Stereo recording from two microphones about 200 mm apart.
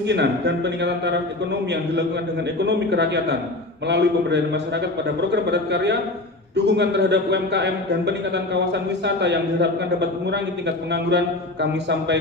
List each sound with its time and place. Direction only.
0.1 s a man's voice: 60° right (ahead or behind)
2.6 s a man's voice: 60° right (ahead or behind)